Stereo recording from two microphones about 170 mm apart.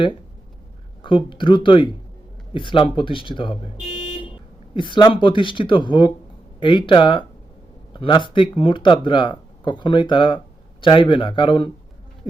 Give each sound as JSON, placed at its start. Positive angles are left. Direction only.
{"t": 1.0, "sound": "speech", "side_deg": 30}
{"t": 4.7, "sound": "speech", "side_deg": 30}